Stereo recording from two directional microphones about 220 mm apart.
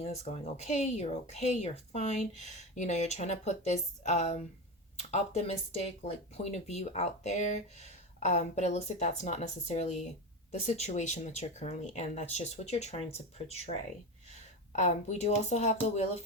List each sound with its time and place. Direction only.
0.0 s speech: 30° left (ahead or behind)